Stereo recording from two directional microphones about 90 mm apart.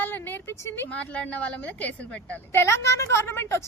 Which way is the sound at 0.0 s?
25° left (ahead or behind).